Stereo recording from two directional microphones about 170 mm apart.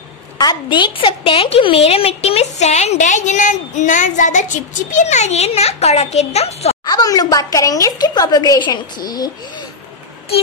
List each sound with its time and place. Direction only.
0.4 s a woman's voice: 25° left (ahead or behind)
6.8 s a woman's voice: 20° left (ahead or behind)